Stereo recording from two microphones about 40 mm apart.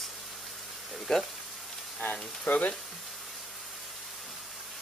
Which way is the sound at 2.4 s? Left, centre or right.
Left.